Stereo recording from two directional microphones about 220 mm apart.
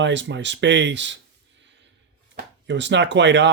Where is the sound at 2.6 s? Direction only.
55° right (ahead or behind).